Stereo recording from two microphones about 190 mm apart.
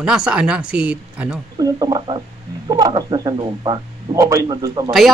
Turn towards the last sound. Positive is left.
turn(degrees=-20)  # may be behind; listen again after turning